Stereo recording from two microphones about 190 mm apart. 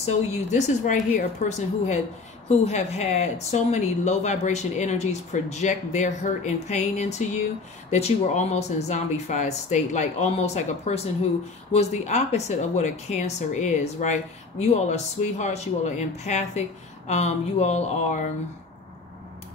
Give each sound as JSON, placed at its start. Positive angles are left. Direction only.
{"t": 0.0, "sound": "speech", "side_deg": 40}